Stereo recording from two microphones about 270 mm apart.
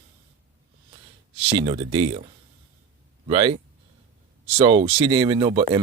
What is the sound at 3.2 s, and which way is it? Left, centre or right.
Speech, right.